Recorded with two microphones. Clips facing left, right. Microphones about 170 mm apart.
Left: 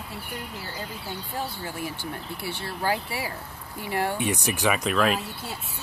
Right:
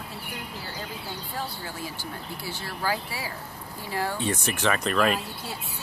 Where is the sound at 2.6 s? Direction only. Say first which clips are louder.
Left 2 dB; 25° left (ahead or behind); by 5.1 s 5° left (ahead or behind).